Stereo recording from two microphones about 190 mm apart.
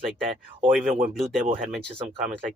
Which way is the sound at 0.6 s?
45° right (ahead or behind).